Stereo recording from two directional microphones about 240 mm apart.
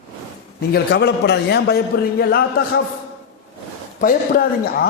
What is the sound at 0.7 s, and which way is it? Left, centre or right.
A man's voice, left.